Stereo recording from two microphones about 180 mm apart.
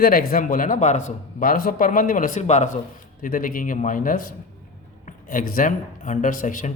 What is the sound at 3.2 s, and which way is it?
Speech, 50° left (ahead or behind).